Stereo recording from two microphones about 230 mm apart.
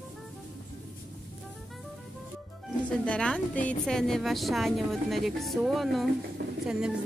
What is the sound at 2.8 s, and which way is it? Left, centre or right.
A woman's voice, centre.